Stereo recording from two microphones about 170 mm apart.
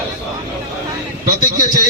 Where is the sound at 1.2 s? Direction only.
55° right (ahead or behind).